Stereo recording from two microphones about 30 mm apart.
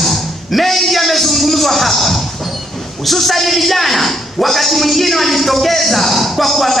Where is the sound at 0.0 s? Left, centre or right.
Centre.